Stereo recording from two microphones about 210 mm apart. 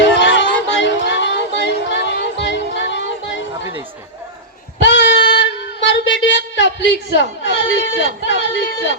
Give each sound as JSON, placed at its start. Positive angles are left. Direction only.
{"t": 0.0, "sound": "music", "side_deg": 55}
{"t": 4.8, "sound": "child singing", "side_deg": 60}